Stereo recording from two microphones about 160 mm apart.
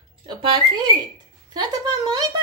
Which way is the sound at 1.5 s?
25° right (ahead or behind).